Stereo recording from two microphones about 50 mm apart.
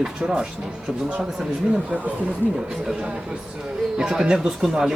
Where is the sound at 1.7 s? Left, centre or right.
Right.